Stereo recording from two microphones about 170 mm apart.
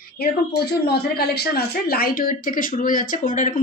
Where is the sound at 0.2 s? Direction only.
70° left (ahead or behind).